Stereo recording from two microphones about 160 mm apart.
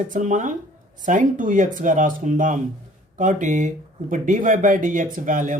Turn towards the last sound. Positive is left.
turn(degrees=-55)  # may be behind; listen again after turning